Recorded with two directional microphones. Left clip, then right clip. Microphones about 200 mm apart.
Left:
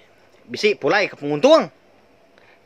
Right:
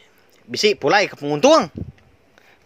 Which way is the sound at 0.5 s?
45° right (ahead or behind).